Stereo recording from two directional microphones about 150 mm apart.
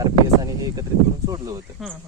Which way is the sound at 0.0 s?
25° right (ahead or behind).